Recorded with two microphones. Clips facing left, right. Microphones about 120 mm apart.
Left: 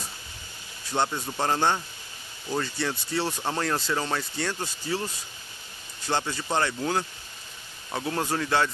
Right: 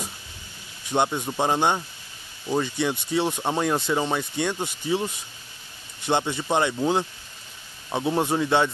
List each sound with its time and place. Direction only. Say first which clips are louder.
0.8 s speech: right 4 dB; 20° right (ahead or behind)